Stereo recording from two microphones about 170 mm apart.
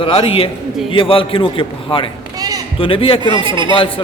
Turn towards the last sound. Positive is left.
turn(degrees=-30)  # may be behind; listen again after turning